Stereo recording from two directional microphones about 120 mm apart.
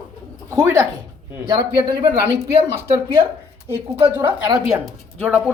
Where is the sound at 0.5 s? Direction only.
25° right (ahead or behind).